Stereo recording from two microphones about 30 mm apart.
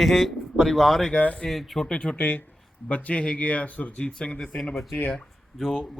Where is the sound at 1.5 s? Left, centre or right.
Centre.